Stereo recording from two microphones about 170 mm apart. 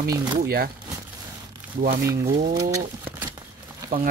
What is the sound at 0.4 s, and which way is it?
Speech, 60° right (ahead or behind).